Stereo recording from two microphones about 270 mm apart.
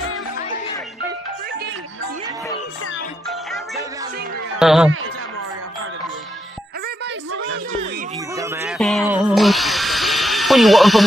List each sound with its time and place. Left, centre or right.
3.3 s music: centre
4.6 s speech: centre
7.3 s a sound: right
8.4 s drill: centre